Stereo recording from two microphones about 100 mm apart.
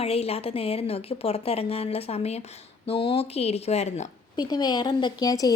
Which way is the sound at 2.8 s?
75° left (ahead or behind).